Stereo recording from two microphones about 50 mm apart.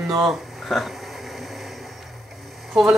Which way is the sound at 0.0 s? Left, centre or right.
Centre.